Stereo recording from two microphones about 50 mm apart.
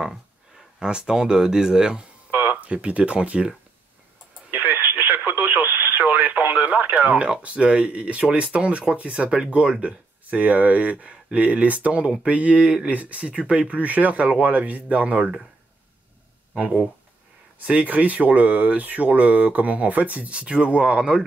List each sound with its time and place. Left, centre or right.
0.7 s speech: centre
2.5 s speech: right
4.6 s radio: right
6.0 s speech: right
16.5 s speech: right